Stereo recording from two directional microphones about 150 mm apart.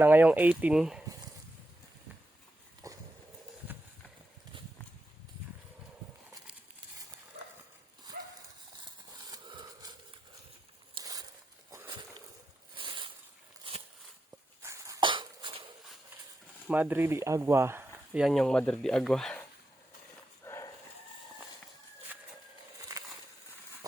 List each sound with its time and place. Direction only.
0.0 s speech: 10° right (ahead or behind)
2.8 s a sound: 20° right (ahead or behind)
3.7 s clip-clop: 10° right (ahead or behind)
8.1 s clip-clop: 75° right (ahead or behind)
8.8 s horse: 30° right (ahead or behind)
10.9 s a sound: 25° right (ahead or behind)
14.6 s cough: 20° right (ahead or behind)
15.0 s cough: 30° right (ahead or behind)
16.6 s speech: 10° right (ahead or behind)
18.2 s speech: centre (ahead or behind)
20.4 s dog: 20° left (ahead or behind)